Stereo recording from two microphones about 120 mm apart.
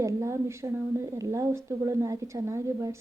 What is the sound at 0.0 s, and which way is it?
Speech, 25° right (ahead or behind).